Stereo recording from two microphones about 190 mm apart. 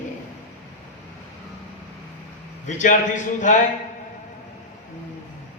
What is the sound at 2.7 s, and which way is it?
Speech, 40° left (ahead or behind).